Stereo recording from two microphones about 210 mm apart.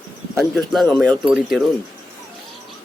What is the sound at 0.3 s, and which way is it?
Speech, centre (ahead or behind).